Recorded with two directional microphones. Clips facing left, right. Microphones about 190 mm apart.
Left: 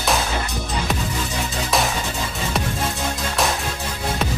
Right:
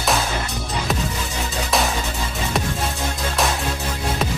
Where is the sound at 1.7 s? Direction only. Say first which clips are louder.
Even; centre (ahead or behind).